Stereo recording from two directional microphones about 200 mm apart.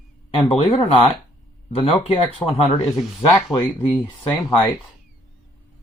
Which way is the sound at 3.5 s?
25° left (ahead or behind).